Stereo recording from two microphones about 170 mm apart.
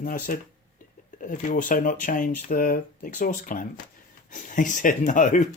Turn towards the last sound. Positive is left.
turn(degrees=45)  # may be behind; listen again after turning